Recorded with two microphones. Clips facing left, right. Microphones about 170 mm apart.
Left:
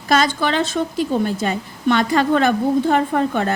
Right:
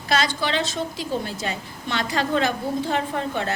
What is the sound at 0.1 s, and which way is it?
A woman's voice, 50° left (ahead or behind).